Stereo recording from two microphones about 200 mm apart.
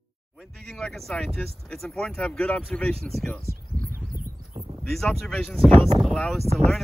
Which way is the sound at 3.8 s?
45° right (ahead or behind).